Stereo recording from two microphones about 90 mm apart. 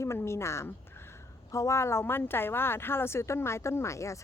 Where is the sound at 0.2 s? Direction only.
30° left (ahead or behind).